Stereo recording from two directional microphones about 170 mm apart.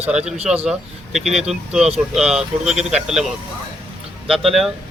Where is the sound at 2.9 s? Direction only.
5° right (ahead or behind).